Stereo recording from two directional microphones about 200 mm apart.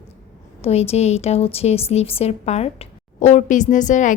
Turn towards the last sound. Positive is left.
turn(degrees=40)  # may be behind; listen again after turning